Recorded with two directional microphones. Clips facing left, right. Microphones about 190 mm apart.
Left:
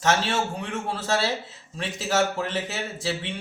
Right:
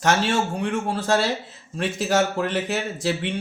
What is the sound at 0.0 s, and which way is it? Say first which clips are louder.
Speech: right 3 dB; 45° right (ahead or behind).